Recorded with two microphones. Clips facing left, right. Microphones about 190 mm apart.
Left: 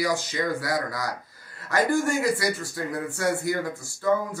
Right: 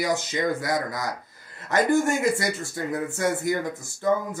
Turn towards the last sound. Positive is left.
turn(degrees=-20)  # may be behind; listen again after turning